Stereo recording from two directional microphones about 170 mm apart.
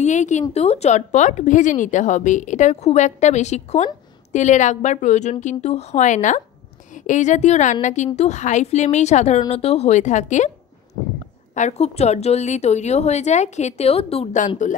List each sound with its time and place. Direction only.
0.0 s a woman's voice: 45° left (ahead or behind)
11.5 s a woman's voice: 40° left (ahead or behind)